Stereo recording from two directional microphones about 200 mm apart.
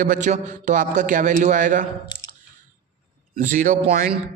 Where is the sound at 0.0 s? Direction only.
40° right (ahead or behind).